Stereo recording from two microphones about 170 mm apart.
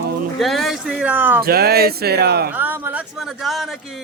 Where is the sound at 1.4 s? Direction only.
65° right (ahead or behind).